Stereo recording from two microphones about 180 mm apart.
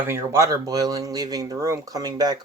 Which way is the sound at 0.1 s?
15° right (ahead or behind).